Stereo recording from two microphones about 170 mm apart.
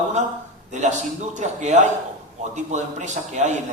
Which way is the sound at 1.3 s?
45° right (ahead or behind).